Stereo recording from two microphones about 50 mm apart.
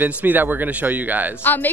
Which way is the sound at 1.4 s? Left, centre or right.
Left.